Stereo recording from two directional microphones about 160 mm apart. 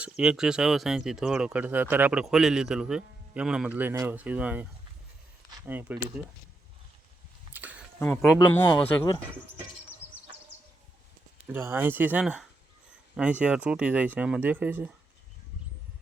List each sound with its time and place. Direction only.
0.0 s speech: 5° right (ahead or behind)
5.6 s speech: 10° right (ahead or behind)
7.5 s a sound: 10° right (ahead or behind)
7.9 s speech: 10° left (ahead or behind)
8.6 s speech: 30° left (ahead or behind)
11.4 s speech: 15° right (ahead or behind)